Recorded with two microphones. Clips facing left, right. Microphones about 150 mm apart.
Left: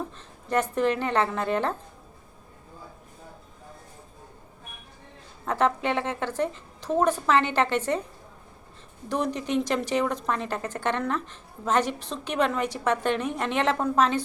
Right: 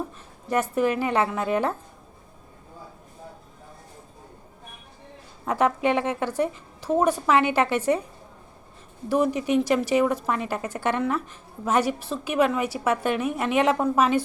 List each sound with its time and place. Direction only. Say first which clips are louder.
0.4 s a woman's voice: right 1 dB; 10° right (ahead or behind)
5.5 s a woman's voice: right 3 dB; 10° right (ahead or behind)
9.0 s a woman's voice: right 5 dB; 5° right (ahead or behind)